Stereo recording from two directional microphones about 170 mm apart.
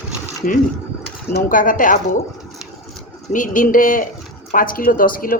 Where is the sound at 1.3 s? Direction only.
55° left (ahead or behind).